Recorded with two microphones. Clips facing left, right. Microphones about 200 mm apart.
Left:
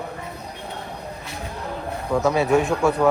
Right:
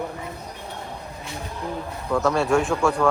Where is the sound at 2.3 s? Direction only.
Centre (ahead or behind).